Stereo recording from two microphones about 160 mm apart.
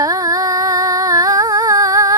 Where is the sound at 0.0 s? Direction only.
20° right (ahead or behind).